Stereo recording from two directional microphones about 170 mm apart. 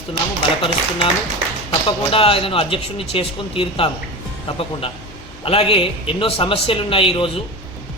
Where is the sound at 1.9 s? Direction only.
30° left (ahead or behind).